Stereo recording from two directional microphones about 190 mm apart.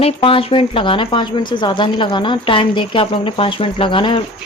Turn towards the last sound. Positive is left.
turn(degrees=25)  # may be behind; listen again after turning